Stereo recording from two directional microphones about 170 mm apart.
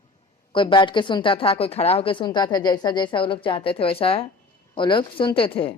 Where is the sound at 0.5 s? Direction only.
30° left (ahead or behind).